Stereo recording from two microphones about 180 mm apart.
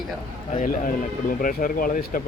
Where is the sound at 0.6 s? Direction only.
50° left (ahead or behind).